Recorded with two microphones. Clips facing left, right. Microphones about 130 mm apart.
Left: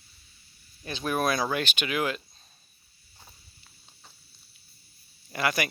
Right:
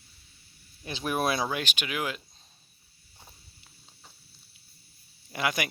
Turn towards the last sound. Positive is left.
turn(degrees=-15)  # may be behind; listen again after turning